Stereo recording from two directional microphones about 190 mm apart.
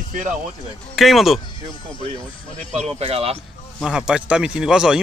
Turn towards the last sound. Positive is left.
turn(degrees=-5)  # may be behind; listen again after turning